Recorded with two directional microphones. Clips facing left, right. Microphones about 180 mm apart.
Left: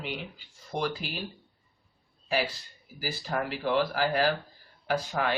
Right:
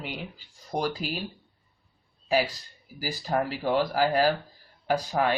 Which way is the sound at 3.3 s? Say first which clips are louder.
Right 3 dB; 35° right (ahead or behind).